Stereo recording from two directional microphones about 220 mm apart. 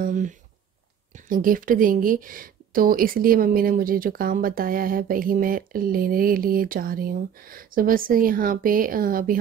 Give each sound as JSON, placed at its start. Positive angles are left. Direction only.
{"t": 0.0, "sound": "speech", "side_deg": -35}